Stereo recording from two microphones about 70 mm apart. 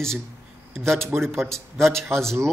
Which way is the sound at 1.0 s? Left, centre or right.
Right.